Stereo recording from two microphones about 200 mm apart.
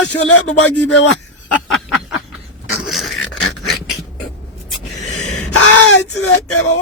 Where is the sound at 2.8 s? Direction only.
Centre (ahead or behind).